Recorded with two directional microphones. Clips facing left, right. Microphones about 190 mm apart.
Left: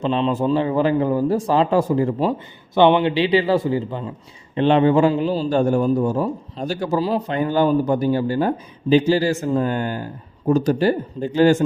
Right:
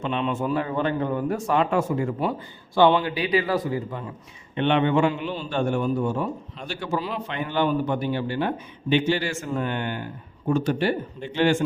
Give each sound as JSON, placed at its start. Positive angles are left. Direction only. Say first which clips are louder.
{"t": 0.0, "sound": "a man's voice", "louder": "left 6 dB", "side_deg": 35}